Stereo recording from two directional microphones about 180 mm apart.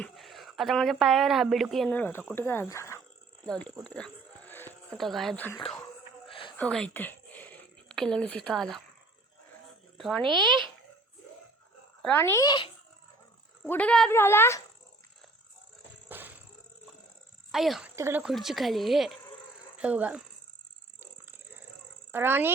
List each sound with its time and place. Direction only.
0.0 s a woman's voice: centre (ahead or behind); by 3.0 s 15° left (ahead or behind)
3.8 s a sound: 5° left (ahead or behind)
4.9 s speech: centre (ahead or behind)
6.2 s a sound: 30° left (ahead or behind)
6.6 s speech: 5° left (ahead or behind)
10.0 s speech: centre (ahead or behind)
12.0 s speech: 15° left (ahead or behind)
13.7 s speech: 10° left (ahead or behind)
16.0 s music: 10° right (ahead or behind)
17.5 s speech: centre (ahead or behind)
17.9 s speech: 15° right (ahead or behind)
18.3 s speech: centre (ahead or behind)
22.1 s speech: 10° right (ahead or behind)